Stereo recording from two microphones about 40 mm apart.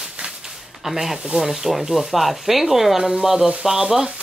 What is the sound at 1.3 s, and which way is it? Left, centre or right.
Speech, centre.